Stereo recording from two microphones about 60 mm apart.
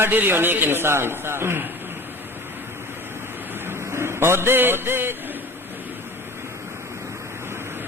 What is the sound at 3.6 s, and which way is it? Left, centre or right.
A man's voice, right.